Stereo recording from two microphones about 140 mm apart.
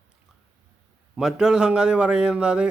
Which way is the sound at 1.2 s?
5° right (ahead or behind).